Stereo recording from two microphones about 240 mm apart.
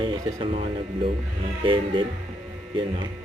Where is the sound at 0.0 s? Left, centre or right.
Right.